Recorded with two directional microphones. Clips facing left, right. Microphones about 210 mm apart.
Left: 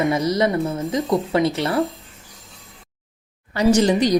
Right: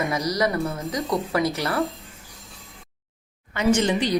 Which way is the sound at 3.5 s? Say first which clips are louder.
Left 4 dB; 35° left (ahead or behind).